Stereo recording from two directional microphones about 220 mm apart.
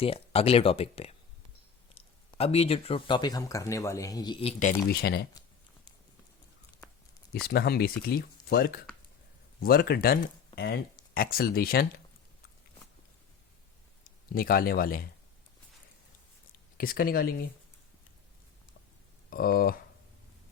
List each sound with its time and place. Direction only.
0.0 s speech: 25° left (ahead or behind)
4.6 s speech: 45° left (ahead or behind)
7.4 s speech: 45° left (ahead or behind)
14.3 s speech: 40° left (ahead or behind)
16.7 s speech: 40° left (ahead or behind)
19.3 s speech: 40° left (ahead or behind)